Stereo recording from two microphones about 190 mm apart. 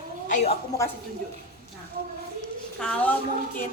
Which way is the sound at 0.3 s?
40° left (ahead or behind).